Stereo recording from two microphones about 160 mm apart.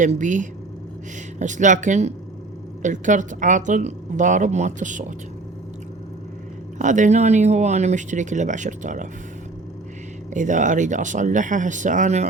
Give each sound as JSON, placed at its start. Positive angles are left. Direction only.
{"t": 0.0, "sound": "a woman's voice", "side_deg": -50}
{"t": 6.7, "sound": "a woman's voice", "side_deg": -50}
{"t": 10.3, "sound": "a woman's voice", "side_deg": -50}